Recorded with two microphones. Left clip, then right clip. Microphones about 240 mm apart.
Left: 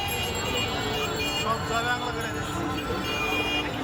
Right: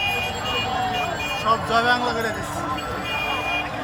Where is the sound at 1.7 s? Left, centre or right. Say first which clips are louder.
Right 8 dB; right.